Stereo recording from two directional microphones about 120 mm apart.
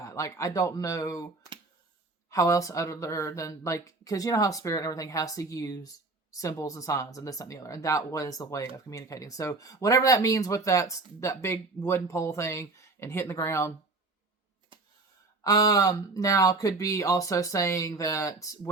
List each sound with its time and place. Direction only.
0.0 s speech: 25° left (ahead or behind)
2.3 s speech: 25° left (ahead or behind)
15.4 s speech: 30° left (ahead or behind)